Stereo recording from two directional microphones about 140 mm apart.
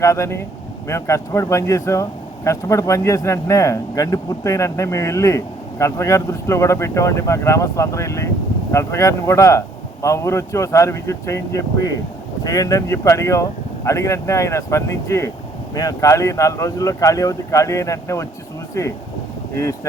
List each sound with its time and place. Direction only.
0.0 s speech: 20° left (ahead or behind)